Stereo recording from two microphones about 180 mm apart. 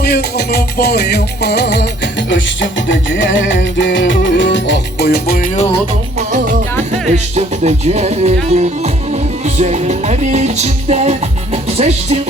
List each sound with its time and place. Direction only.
0.0 s music: 65° left (ahead or behind)
2.3 s music: 90° left; by 5.5 s 60° left (ahead or behind)
6.1 s music: 45° right (ahead or behind)